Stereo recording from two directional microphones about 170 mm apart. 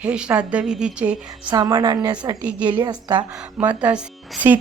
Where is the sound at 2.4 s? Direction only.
10° right (ahead or behind).